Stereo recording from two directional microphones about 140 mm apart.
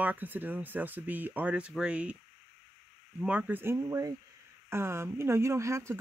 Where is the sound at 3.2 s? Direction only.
10° right (ahead or behind).